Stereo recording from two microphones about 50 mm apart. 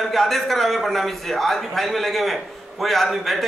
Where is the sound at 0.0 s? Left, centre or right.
Centre.